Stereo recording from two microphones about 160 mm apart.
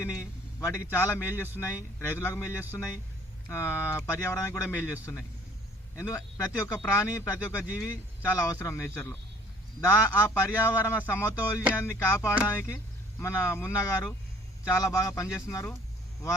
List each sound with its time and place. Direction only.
0.0 s a man's voice: 15° left (ahead or behind)
6.0 s a man's voice: 20° left (ahead or behind)